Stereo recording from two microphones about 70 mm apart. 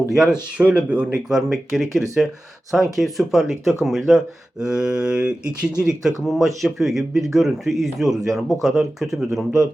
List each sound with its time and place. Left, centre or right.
0.1 s speech: centre
0.5 s speech: centre
1.3 s speech: centre
6.2 s speech: centre